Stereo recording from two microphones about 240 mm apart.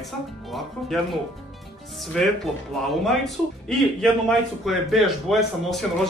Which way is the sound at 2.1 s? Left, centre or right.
Centre.